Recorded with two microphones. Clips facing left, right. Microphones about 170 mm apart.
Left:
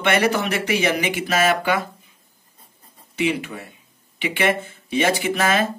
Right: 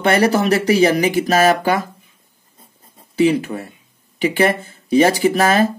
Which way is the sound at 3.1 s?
35° right (ahead or behind).